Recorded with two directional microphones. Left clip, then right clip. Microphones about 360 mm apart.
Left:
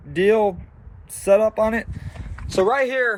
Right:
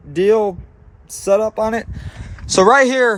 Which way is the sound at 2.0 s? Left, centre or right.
Right.